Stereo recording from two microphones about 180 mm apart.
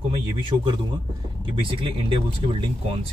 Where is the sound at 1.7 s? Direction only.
30° right (ahead or behind).